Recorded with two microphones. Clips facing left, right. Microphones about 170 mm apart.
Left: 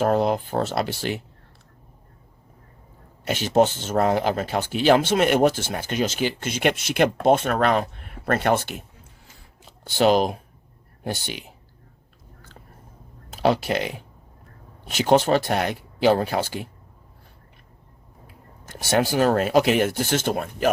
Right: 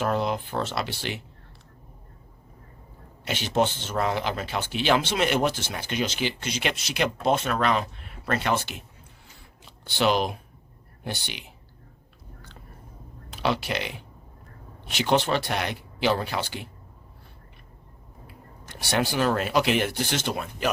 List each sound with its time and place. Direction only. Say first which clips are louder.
0.0 s speech: left 5 dB; 45° left (ahead or behind)
3.2 s speech: left 5 dB; 45° left (ahead or behind)
13.3 s speech: left 6 dB; 45° left (ahead or behind)
18.6 s speech: left 5 dB; 45° left (ahead or behind)